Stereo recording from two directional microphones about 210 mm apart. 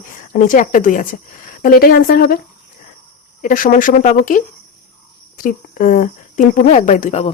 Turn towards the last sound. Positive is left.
turn(degrees=30)  # may be behind; listen again after turning